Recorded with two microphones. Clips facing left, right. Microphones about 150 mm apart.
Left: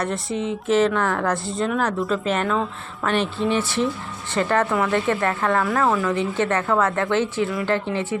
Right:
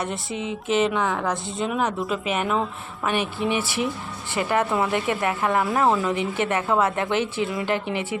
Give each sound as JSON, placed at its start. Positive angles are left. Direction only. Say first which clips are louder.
{"t": 0.0, "sound": "a woman's voice", "louder": "left 4 dB", "side_deg": 0}
{"t": 1.3, "sound": "a woman's voice", "louder": "left 3 dB", "side_deg": 0}
{"t": 4.4, "sound": "a woman's voice", "louder": "left 2 dB", "side_deg": -15}